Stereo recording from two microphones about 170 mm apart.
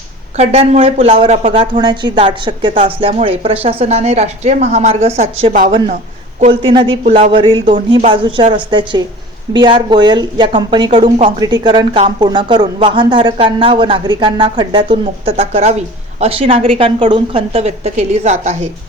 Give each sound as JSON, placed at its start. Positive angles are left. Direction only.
{"t": 0.3, "sound": "speech", "side_deg": -40}
{"t": 1.8, "sound": "speech", "side_deg": -25}